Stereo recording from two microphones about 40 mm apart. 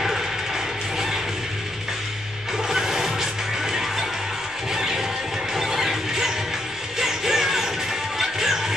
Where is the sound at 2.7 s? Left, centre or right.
Centre.